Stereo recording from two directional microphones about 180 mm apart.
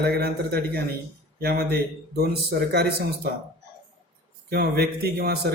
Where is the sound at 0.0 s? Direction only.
65° right (ahead or behind).